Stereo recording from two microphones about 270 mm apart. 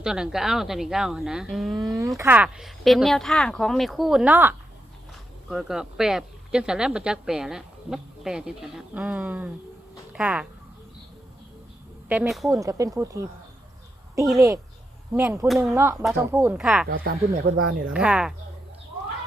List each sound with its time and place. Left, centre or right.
0.0 s speech: centre
12.0 s speech: centre
14.3 s speech: centre
16.9 s speech: right
17.9 s speech: centre